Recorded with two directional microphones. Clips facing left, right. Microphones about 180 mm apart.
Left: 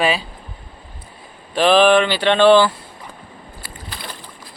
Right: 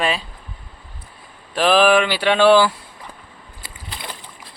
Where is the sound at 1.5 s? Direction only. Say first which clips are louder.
Left 2 dB; 5° right (ahead or behind).